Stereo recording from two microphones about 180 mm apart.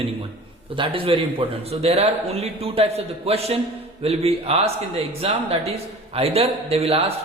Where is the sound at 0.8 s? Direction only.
30° right (ahead or behind).